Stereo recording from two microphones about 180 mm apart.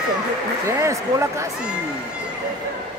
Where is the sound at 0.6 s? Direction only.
15° right (ahead or behind).